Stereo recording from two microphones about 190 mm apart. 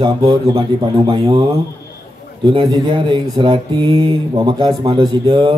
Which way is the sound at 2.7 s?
20° right (ahead or behind).